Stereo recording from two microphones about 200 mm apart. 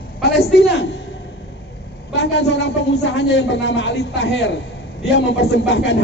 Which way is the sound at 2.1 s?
60° left (ahead or behind).